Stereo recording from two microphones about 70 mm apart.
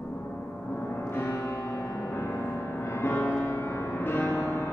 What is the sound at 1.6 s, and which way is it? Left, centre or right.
Music, left.